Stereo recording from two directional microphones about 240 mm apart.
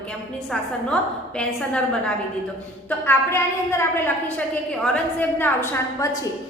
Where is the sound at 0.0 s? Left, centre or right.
Centre.